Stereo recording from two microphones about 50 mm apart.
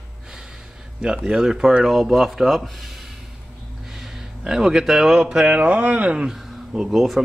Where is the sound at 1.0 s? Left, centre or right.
Centre.